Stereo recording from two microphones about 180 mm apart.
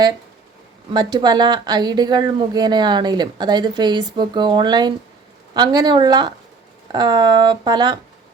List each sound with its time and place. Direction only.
0.9 s speech: 20° right (ahead or behind)